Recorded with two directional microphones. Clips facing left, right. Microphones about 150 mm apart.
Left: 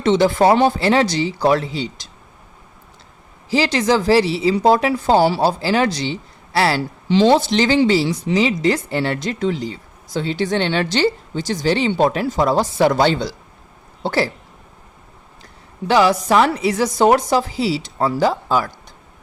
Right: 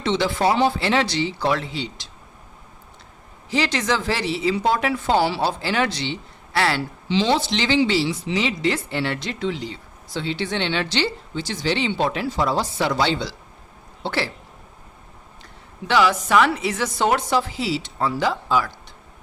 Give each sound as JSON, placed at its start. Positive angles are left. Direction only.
{"t": 0.0, "sound": "speech", "side_deg": 45}
{"t": 3.5, "sound": "a woman's voice", "side_deg": 35}
{"t": 15.9, "sound": "speech", "side_deg": 35}